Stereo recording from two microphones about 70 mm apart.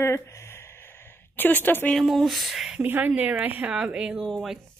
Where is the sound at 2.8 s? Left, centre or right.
Right.